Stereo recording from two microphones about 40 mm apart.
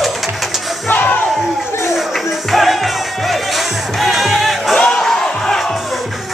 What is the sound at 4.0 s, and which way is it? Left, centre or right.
Music, centre.